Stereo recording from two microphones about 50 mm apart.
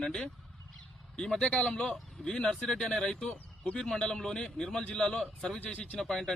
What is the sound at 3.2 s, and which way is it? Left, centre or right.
Speech, left.